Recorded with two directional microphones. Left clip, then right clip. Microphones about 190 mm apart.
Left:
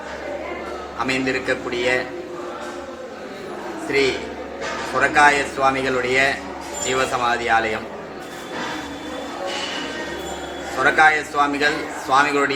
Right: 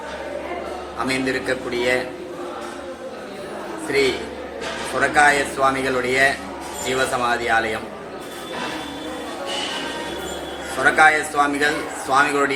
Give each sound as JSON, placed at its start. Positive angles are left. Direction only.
{"t": 1.0, "sound": "speech", "side_deg": -15}
{"t": 4.9, "sound": "speech", "side_deg": -15}
{"t": 10.8, "sound": "speech", "side_deg": -15}